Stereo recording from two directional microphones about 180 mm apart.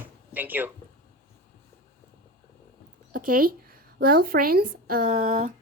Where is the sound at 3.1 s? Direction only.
50° right (ahead or behind).